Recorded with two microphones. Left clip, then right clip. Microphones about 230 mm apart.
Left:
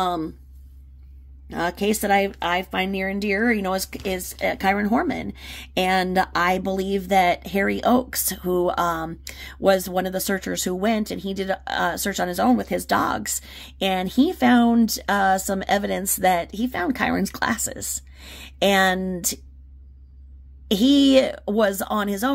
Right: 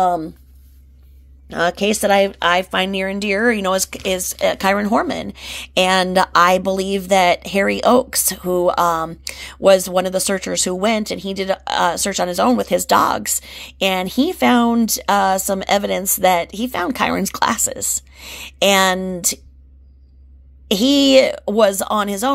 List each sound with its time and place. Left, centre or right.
1.5 s speech: centre
20.6 s speech: centre